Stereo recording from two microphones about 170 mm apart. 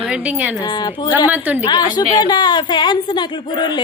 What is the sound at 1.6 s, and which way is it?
A woman's voice, 25° left (ahead or behind).